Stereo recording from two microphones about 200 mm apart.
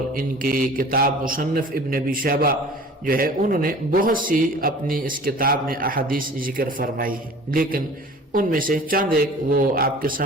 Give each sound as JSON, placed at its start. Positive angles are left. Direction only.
{"t": 0.2, "sound": "a man's voice", "side_deg": -45}